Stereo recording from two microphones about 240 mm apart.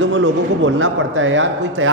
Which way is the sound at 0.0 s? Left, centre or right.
Right.